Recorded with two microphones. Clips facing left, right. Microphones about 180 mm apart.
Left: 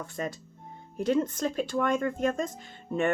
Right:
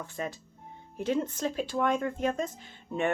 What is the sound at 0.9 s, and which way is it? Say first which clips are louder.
Speech: left 3 dB; 40° left (ahead or behind).